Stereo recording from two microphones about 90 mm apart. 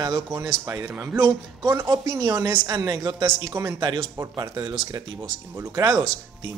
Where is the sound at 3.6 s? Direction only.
30° right (ahead or behind).